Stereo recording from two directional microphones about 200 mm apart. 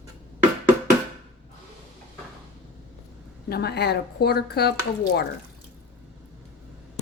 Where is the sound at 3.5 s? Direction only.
55° left (ahead or behind).